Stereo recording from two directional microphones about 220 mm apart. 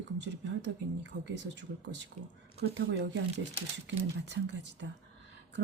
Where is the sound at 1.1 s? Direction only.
45° right (ahead or behind).